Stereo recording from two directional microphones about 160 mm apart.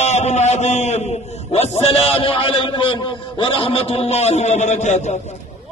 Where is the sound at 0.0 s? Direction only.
45° left (ahead or behind).